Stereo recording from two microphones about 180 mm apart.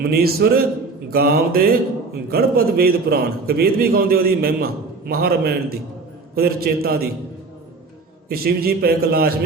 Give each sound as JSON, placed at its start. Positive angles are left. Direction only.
{"t": 0.0, "sound": "a man's voice", "side_deg": -60}
{"t": 8.3, "sound": "a man's voice", "side_deg": -55}